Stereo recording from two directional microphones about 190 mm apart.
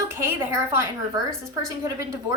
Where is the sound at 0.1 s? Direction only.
15° right (ahead or behind).